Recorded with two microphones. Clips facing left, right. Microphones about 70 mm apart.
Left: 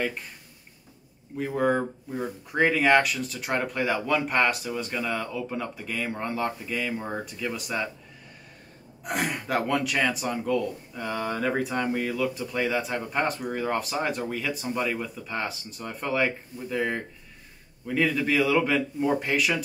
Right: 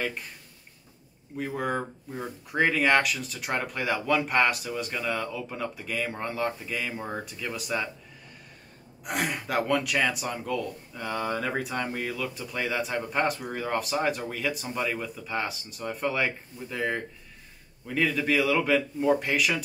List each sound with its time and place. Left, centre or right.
1.3 s speech: centre
9.0 s speech: centre